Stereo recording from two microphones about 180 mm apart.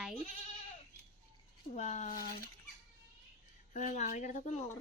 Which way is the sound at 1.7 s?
40° left (ahead or behind).